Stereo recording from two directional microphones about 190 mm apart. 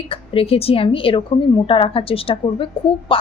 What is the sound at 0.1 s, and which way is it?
A woman's voice, 30° left (ahead or behind).